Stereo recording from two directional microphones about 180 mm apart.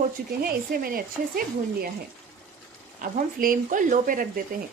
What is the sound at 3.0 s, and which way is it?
A woman's voice, 50° right (ahead or behind).